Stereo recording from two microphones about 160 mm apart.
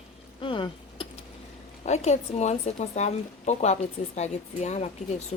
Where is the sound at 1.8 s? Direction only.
45° left (ahead or behind).